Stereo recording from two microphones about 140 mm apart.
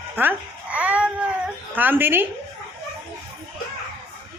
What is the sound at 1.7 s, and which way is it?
Speech, 15° right (ahead or behind).